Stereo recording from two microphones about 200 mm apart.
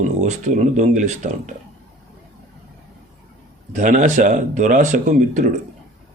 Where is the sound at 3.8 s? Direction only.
40° right (ahead or behind).